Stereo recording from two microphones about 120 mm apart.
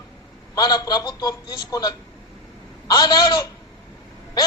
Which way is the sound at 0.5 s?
35° left (ahead or behind).